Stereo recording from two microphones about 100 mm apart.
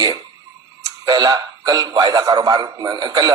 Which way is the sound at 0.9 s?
45° right (ahead or behind).